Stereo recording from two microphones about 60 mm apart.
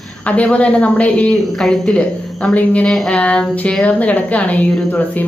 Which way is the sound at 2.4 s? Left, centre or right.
Left.